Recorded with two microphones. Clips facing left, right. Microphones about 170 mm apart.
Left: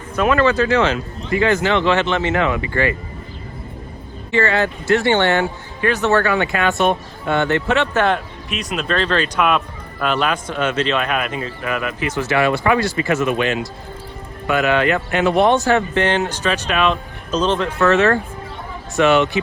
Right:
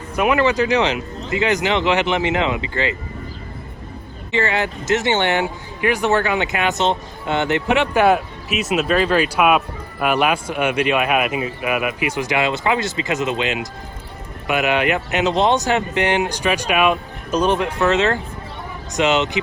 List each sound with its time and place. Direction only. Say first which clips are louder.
0.2 s speech: left 1 dB; 15° right (ahead or behind)
4.3 s speech: left 3 dB; 15° right (ahead or behind)